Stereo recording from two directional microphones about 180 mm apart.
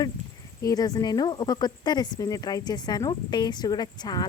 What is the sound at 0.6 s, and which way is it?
Speech, 20° left (ahead or behind).